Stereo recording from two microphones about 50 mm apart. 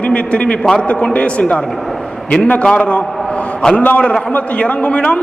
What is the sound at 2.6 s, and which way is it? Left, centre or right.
A man's voice, left.